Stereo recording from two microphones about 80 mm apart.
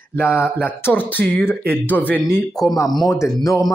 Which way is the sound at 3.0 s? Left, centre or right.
Left.